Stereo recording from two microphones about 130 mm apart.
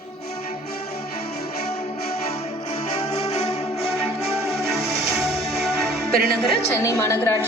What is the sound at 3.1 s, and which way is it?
Music, 55° left (ahead or behind).